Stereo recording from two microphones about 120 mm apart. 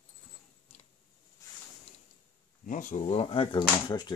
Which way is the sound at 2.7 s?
90° left.